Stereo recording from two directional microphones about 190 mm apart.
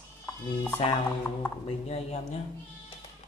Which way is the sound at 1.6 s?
35° left (ahead or behind).